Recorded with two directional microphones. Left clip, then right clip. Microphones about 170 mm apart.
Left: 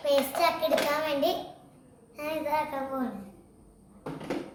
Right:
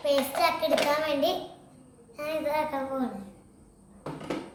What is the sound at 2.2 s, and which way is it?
Speech, 15° left (ahead or behind).